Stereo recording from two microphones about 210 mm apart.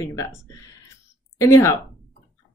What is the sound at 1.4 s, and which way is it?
Speech, 10° left (ahead or behind).